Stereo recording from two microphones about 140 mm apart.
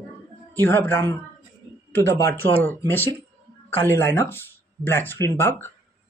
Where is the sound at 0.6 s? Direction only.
15° left (ahead or behind).